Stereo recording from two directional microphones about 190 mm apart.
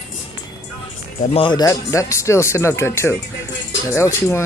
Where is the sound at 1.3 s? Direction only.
25° left (ahead or behind).